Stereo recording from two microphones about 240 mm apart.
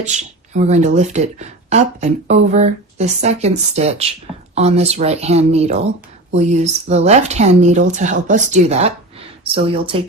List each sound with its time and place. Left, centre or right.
0.0 s speech: right